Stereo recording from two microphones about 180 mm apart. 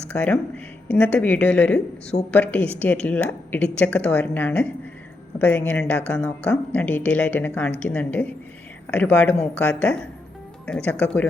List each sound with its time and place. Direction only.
0.1 s speech: 10° left (ahead or behind)